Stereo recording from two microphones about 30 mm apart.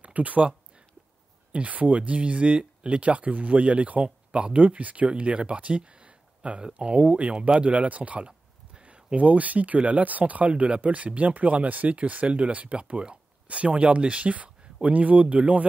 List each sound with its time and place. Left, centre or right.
0.0 s speech: right
5.7 s a sound: right
7.0 s speech: right
9.8 s speech: right
10.0 s speech: right
10.5 s speech: right
10.8 s speech: right